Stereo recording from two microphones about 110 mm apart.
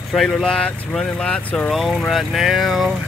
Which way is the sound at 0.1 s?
Centre (ahead or behind).